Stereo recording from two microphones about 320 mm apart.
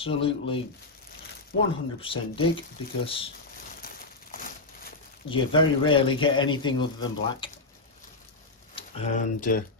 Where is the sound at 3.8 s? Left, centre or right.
Left.